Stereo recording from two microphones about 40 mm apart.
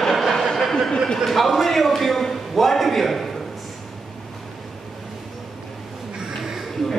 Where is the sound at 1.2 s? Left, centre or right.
Centre.